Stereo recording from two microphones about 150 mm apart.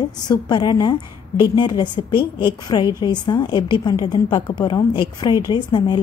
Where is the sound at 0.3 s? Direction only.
30° left (ahead or behind).